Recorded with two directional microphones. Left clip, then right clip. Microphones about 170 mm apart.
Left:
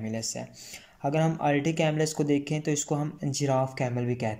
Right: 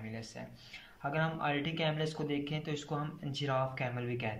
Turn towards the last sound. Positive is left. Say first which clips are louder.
# left 7 dB
turn(degrees=35)  # may be behind; listen again after turning